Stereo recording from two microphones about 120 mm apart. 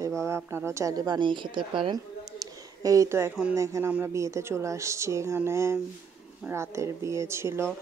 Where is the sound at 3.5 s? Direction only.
25° right (ahead or behind).